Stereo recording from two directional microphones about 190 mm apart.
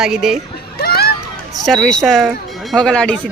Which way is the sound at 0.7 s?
55° left (ahead or behind).